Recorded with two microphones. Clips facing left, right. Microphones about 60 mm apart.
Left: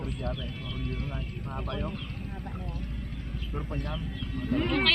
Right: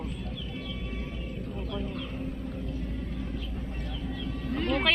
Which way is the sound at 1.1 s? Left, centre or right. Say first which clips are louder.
Even; left.